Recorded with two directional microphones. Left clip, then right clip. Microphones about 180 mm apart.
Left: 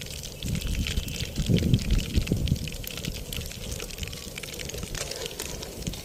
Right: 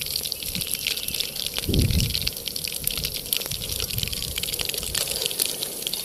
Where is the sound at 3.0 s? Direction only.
Centre (ahead or behind).